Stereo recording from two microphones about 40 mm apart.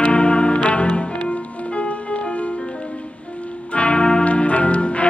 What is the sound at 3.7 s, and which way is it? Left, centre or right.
Music, left.